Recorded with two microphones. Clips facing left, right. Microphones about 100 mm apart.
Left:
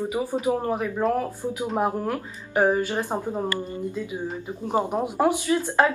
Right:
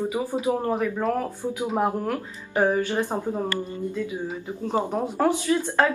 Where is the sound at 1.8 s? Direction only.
10° left (ahead or behind).